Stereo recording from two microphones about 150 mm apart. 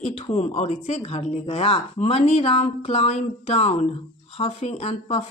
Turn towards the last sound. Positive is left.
turn(degrees=45)  # may be behind; listen again after turning